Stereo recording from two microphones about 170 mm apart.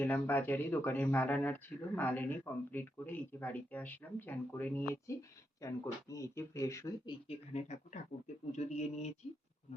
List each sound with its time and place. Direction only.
0.0 s speech: 10° left (ahead or behind); by 7.3 s 25° left (ahead or behind)
7.5 s speech: 45° left (ahead or behind)